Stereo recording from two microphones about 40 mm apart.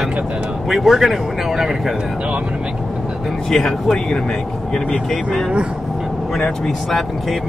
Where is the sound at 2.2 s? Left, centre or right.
Right.